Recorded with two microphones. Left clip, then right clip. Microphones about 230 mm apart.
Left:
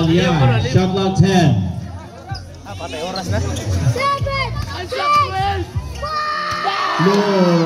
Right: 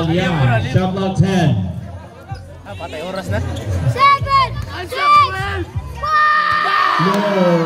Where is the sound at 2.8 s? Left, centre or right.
Centre.